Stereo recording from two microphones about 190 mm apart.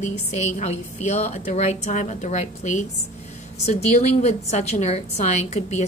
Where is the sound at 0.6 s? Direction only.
35° left (ahead or behind).